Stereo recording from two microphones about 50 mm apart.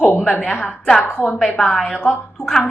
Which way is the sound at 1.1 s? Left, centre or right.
Left.